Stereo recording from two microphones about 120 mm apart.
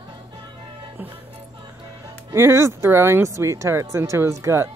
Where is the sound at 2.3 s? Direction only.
20° right (ahead or behind).